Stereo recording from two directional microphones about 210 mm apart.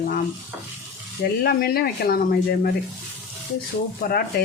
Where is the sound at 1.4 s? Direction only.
45° left (ahead or behind).